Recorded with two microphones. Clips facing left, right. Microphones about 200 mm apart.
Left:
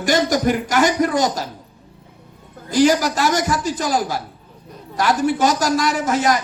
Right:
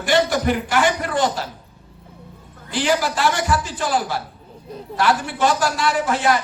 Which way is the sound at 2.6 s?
40° left (ahead or behind).